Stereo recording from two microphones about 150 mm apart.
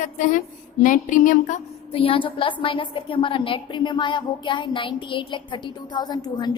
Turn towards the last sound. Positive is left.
turn(degrees=30)  # may be behind; listen again after turning